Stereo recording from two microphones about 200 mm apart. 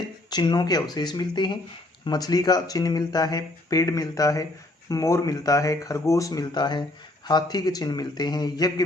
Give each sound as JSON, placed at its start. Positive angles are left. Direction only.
{"t": 0.3, "sound": "speech", "side_deg": 20}